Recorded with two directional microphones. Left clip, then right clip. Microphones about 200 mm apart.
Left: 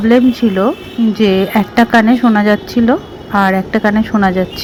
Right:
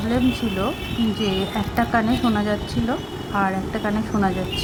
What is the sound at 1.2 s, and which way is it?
A woman's voice, 20° left (ahead or behind).